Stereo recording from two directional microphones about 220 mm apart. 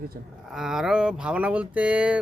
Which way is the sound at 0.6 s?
Centre (ahead or behind).